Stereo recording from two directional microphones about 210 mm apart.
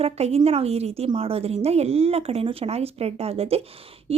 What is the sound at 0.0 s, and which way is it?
Speech, 30° right (ahead or behind).